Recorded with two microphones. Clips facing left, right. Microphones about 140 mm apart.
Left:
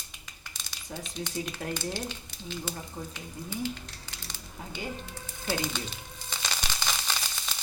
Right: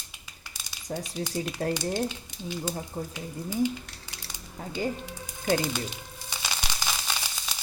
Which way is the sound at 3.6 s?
15° right (ahead or behind).